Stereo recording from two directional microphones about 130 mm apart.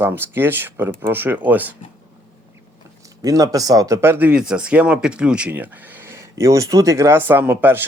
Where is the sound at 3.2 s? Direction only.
25° right (ahead or behind).